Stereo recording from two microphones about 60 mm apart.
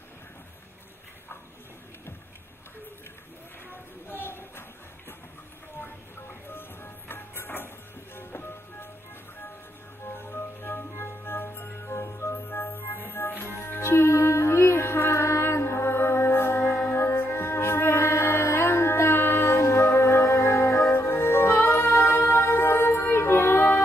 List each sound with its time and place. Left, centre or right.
3.7 s a sound: left
6.5 s music: left
10.1 s organ: left
13.4 s music: left